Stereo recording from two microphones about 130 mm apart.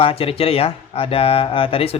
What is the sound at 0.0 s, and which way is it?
Speech, 45° left (ahead or behind).